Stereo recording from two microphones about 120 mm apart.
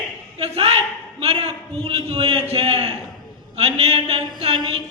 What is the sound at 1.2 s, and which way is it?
A man's voice, 60° right (ahead or behind).